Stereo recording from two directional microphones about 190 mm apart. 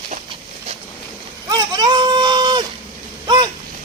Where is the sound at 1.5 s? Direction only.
20° right (ahead or behind).